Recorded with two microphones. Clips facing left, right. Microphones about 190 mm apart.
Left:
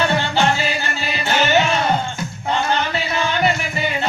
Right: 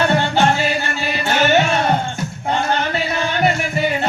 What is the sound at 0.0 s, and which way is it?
Music, 50° right (ahead or behind).